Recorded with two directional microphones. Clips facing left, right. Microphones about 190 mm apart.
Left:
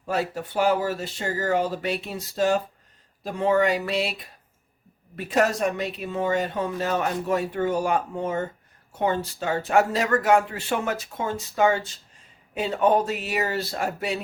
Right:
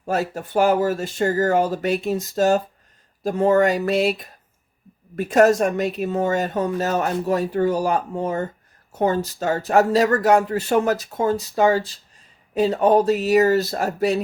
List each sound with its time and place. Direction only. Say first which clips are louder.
0.0 s speech: right 3 dB; 45° right (ahead or behind)